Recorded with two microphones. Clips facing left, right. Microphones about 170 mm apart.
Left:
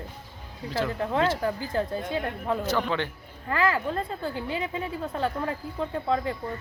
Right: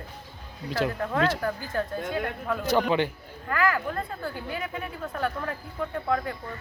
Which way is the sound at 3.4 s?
25° left (ahead or behind).